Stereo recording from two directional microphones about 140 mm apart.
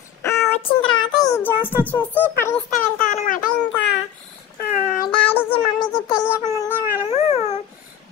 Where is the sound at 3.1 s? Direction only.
70° left (ahead or behind).